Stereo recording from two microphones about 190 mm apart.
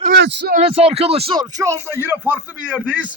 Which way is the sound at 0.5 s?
30° right (ahead or behind).